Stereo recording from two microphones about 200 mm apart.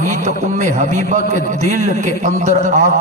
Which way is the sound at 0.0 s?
40° right (ahead or behind).